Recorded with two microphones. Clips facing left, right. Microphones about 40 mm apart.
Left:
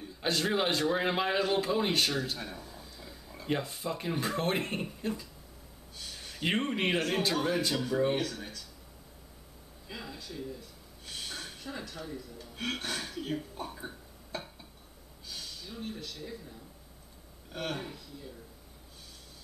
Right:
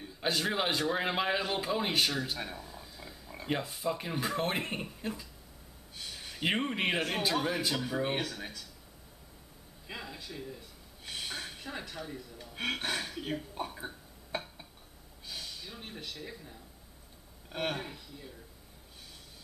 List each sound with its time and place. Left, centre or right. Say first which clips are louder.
0.2 s a man's voice: left 2 dB; centre
10.1 s speech: left 2 dB; centre
11.1 s a sound: right 2 dB; centre
12.4 s a man's voice: right 2 dB; right
14.3 s a sound: right 2 dB; right
15.3 s a man's voice: left 1 dB; centre